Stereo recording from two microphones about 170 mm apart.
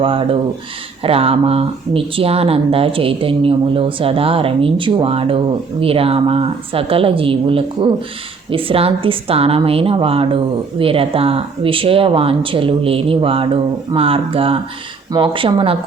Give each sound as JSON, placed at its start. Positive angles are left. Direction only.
{"t": 0.0, "sound": "speech", "side_deg": -30}